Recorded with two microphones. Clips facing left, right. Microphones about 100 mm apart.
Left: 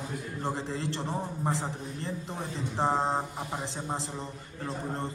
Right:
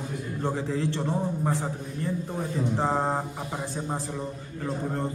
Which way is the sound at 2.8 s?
20° left (ahead or behind).